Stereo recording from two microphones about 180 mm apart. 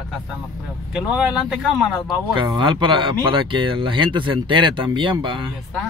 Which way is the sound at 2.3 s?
25° right (ahead or behind).